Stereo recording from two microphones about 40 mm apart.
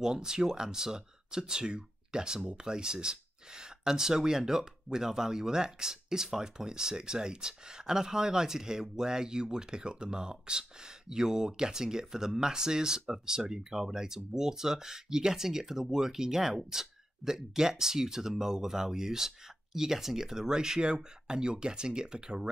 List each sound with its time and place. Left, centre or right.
0.0 s speech: centre